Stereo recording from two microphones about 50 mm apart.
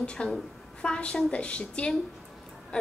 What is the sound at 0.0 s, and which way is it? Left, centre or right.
A woman's voice, centre.